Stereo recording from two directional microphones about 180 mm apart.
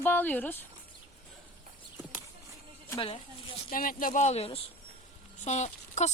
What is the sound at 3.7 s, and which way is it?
Speech, 50° left (ahead or behind).